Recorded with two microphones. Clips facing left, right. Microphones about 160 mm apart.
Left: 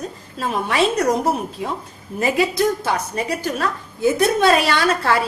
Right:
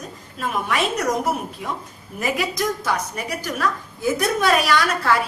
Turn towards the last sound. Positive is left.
turn(degrees=30)  # may be behind; listen again after turning